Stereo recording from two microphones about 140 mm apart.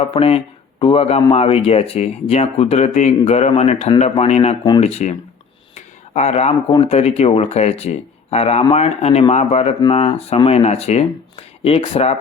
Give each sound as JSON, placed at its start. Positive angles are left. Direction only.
{"t": 0.1, "sound": "speech", "side_deg": 45}
{"t": 5.7, "sound": "a sound", "side_deg": 50}
{"t": 6.8, "sound": "speech", "side_deg": 50}